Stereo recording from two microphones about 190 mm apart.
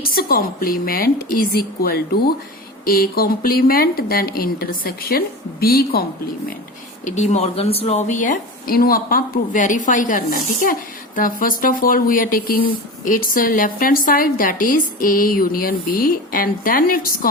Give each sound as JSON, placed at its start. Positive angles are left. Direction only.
{"t": 0.0, "sound": "a woman's voice", "side_deg": 50}
{"t": 7.0, "sound": "a woman's voice", "side_deg": 35}